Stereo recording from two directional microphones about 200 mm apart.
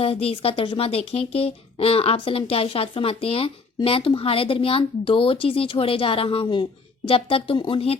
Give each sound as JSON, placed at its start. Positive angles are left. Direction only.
{"t": 0.0, "sound": "speech", "side_deg": 30}